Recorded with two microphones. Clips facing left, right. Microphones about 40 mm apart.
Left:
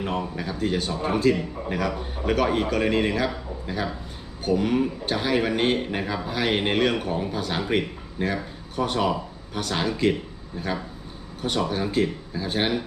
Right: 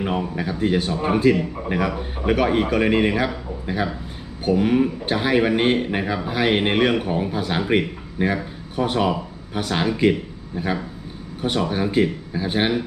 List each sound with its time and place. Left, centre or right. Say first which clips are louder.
0.0 s a man's voice: right 4 dB; centre
11.4 s a man's voice: right 3 dB; centre